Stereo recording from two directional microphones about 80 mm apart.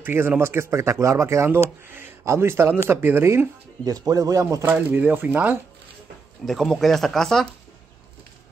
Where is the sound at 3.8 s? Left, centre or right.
Right.